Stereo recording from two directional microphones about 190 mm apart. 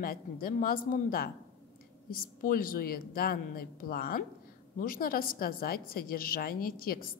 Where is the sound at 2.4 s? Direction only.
45° left (ahead or behind).